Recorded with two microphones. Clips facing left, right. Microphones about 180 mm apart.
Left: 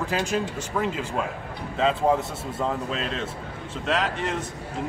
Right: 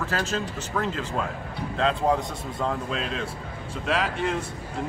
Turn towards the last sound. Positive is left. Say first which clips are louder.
# right 1 dB
turn(degrees=-5)  # may be behind; listen again after turning